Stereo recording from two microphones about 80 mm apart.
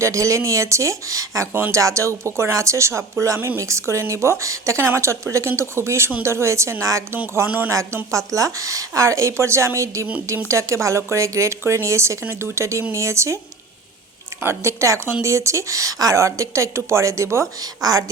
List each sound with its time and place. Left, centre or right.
0.0 s speech: right
7.4 s speech: right
8.1 s speech: right
14.4 s speech: right
17.8 s a woman's voice: right